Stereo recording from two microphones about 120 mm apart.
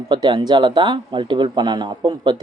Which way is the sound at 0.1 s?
40° right (ahead or behind).